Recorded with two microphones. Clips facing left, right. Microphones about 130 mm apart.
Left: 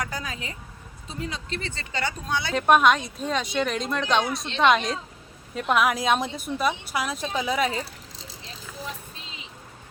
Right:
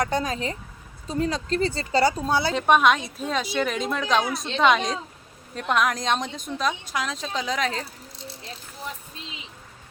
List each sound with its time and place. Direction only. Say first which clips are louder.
0.0 s speech: right 8 dB; 35° right (ahead or behind)
2.6 s speech: left 2 dB; centre (ahead or behind)